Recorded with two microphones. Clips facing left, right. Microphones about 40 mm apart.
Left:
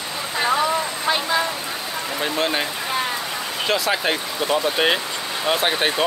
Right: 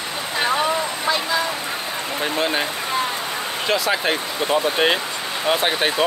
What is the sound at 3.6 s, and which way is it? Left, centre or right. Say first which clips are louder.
Speech: right 1 dB; centre.